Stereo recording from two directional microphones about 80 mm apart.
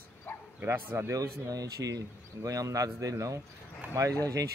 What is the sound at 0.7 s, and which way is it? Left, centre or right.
Speech, right.